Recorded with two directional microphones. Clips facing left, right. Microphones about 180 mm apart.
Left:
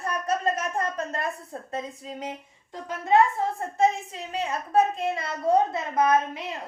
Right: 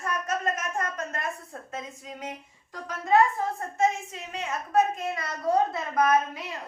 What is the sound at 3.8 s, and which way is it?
A woman's voice, 35° left (ahead or behind).